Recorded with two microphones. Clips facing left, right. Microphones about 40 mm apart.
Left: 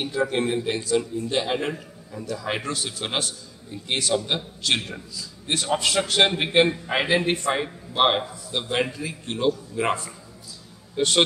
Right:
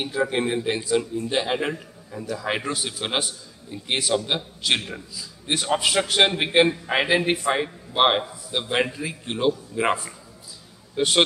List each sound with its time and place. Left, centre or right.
0.0 s a man's voice: centre